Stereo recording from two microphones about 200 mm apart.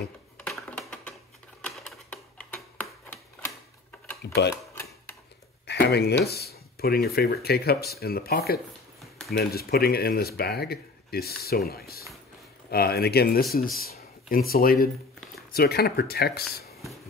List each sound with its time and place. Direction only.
0.4 s computer keyboard: 5° left (ahead or behind)
1.6 s typewriter: 5° left (ahead or behind)
4.2 s speech: 55° left (ahead or behind)
5.7 s a sound: 55° left (ahead or behind)
6.2 s speech: 50° left (ahead or behind)